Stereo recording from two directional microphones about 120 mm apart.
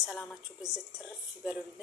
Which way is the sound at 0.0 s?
10° right (ahead or behind).